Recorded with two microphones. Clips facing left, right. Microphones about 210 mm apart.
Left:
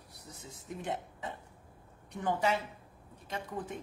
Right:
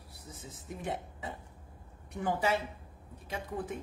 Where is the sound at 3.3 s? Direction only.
5° right (ahead or behind).